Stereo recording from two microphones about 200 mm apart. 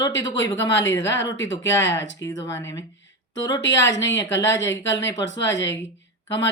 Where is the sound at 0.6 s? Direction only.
65° left (ahead or behind).